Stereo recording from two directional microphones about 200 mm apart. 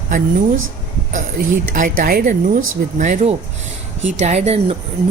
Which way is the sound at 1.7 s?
45° right (ahead or behind).